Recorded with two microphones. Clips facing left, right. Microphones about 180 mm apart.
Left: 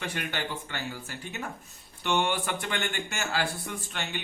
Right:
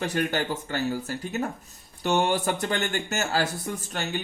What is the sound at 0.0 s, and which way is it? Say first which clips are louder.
Speech: right 7 dB; 40° right (ahead or behind).